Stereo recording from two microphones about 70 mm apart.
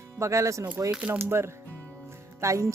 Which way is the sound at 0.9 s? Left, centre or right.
Centre.